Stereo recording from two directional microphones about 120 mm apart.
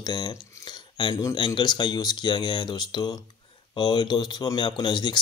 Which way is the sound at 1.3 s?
40° left (ahead or behind).